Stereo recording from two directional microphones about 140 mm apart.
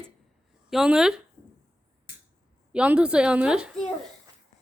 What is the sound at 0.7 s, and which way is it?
Speech, 5° right (ahead or behind).